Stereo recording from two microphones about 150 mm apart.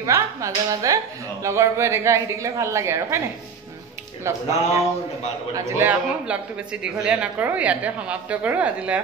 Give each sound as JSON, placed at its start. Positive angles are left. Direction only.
{"t": 0.0, "sound": "speech", "side_deg": -20}
{"t": 4.2, "sound": "a man's voice", "side_deg": -20}